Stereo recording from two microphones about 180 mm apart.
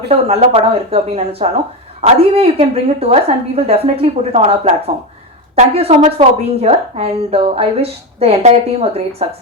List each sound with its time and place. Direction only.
0.1 s a woman's voice: 35° right (ahead or behind)